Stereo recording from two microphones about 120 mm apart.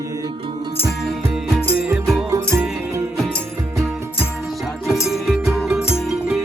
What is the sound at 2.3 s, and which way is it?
Music, 20° right (ahead or behind).